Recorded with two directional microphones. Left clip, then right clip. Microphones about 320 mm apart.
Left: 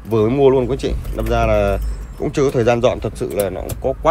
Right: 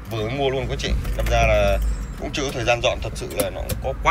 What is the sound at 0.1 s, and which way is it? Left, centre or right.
Speech, centre.